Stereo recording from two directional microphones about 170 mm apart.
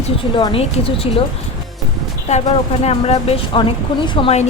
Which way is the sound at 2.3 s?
40° left (ahead or behind).